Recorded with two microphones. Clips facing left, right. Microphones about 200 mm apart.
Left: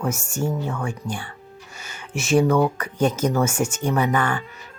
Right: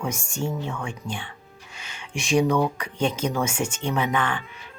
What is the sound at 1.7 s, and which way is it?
Music, 5° left (ahead or behind).